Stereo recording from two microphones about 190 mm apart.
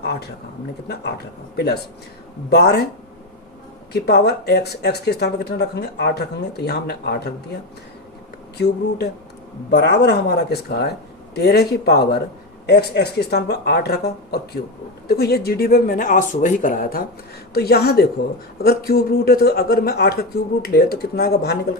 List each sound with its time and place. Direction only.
0.0 s a sound: 60° left (ahead or behind)
0.9 s speech: 60° left (ahead or behind)
3.9 s speech: 55° left (ahead or behind)
8.5 s speech: 60° left (ahead or behind)